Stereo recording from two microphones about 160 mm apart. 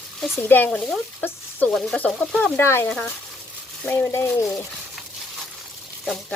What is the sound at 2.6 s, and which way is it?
Speech, 15° left (ahead or behind).